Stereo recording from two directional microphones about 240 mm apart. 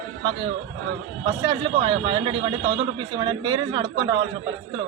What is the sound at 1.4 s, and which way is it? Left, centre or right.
Speech, centre.